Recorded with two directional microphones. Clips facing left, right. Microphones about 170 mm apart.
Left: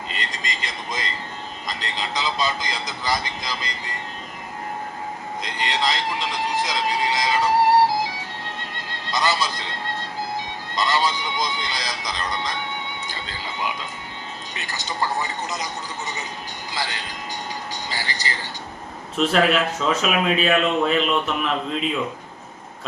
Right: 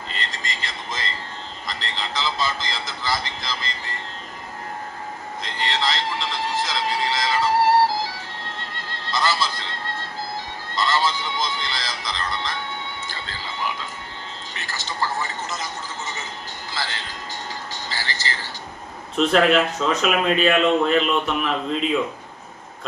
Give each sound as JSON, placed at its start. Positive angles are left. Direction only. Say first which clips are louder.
{"t": 0.1, "sound": "vehicle", "louder": "left 1 dB", "side_deg": 15}
{"t": 1.6, "sound": "speech", "louder": "left 1 dB", "side_deg": 15}
{"t": 5.4, "sound": "speech", "louder": "left 1 dB", "side_deg": 15}
{"t": 8.7, "sound": "music", "louder": "even", "side_deg": 20}
{"t": 10.8, "sound": "speech", "louder": "even", "side_deg": 15}
{"t": 16.7, "sound": "speech", "louder": "left 1 dB", "side_deg": 15}
{"t": 19.1, "sound": "speech", "louder": "right 2 dB", "side_deg": 0}